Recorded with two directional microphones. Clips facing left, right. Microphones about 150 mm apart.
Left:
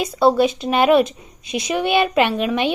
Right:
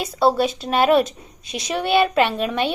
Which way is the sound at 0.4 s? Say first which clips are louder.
Left 2 dB; 10° left (ahead or behind).